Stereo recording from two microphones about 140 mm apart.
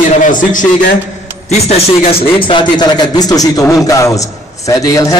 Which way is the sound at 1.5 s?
45° left (ahead or behind).